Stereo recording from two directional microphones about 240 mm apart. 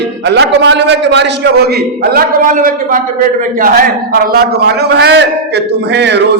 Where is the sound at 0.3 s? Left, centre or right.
Right.